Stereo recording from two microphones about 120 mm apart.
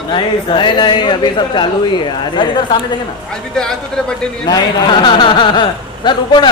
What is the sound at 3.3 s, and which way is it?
Speech, 5° left (ahead or behind).